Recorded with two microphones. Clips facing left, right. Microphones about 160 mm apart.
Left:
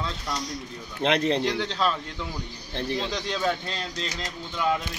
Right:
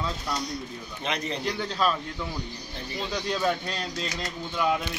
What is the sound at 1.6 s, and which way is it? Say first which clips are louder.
Speech: even; 5° right (ahead or behind).